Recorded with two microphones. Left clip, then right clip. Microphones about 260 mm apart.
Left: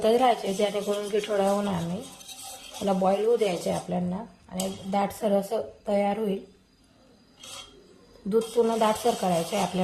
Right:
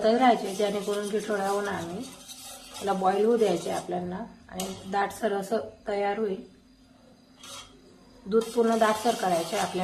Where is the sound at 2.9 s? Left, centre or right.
Left.